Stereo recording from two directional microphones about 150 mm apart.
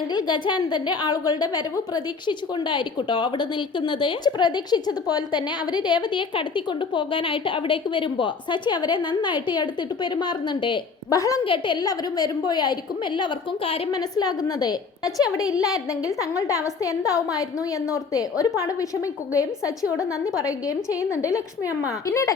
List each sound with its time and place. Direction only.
0.1 s a woman's voice: 30° left (ahead or behind)
11.4 s a woman's voice: 35° left (ahead or behind)
13.9 s a woman's voice: 25° left (ahead or behind)